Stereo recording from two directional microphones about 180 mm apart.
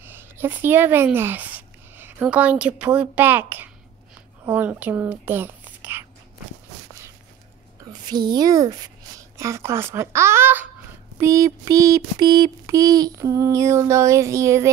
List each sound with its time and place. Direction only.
0.0 s speech: 10° right (ahead or behind)
7.8 s a woman's voice: 25° right (ahead or behind)
9.4 s a sound: 15° right (ahead or behind)